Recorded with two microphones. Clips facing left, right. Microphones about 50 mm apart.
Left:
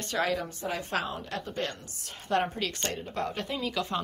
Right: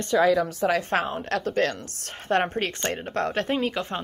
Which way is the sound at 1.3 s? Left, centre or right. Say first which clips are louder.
Right 13 dB; right.